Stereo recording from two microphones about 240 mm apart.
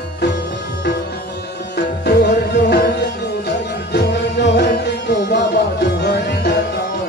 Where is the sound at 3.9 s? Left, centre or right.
Left.